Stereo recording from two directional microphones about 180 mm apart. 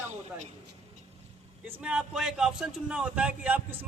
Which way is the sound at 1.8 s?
5° right (ahead or behind).